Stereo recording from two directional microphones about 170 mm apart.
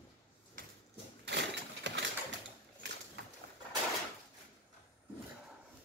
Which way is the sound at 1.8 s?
90° right.